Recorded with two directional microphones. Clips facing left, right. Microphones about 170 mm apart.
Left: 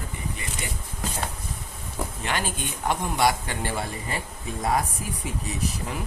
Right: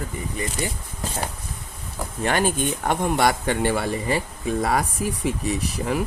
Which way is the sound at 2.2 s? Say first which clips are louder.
Right 10 dB; 50° right (ahead or behind).